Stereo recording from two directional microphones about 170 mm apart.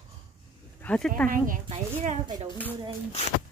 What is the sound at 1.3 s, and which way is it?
Speech, 55° right (ahead or behind).